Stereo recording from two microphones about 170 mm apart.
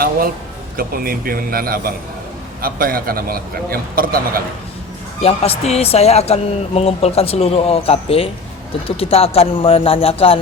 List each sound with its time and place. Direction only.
0.8 s a man's voice: 60° right (ahead or behind)
5.2 s speech: 35° left (ahead or behind)